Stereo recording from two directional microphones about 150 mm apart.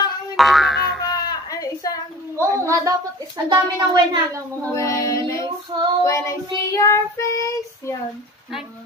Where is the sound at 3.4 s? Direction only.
30° right (ahead or behind).